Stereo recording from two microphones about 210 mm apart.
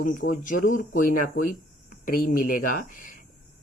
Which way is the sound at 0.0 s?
40° left (ahead or behind).